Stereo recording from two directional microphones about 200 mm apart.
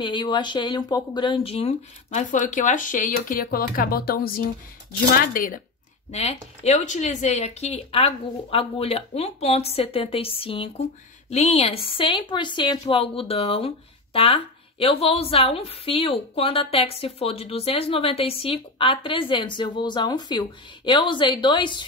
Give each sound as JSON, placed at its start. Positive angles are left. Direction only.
{"t": 0.0, "sound": "speech", "side_deg": 25}
{"t": 6.1, "sound": "speech", "side_deg": 30}